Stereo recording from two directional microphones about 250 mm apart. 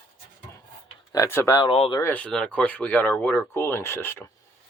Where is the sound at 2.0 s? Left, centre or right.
Centre.